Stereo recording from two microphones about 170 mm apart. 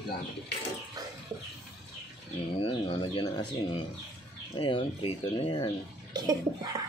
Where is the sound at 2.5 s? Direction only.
35° left (ahead or behind).